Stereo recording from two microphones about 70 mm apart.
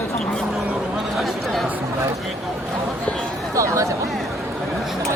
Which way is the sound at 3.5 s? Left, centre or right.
Right.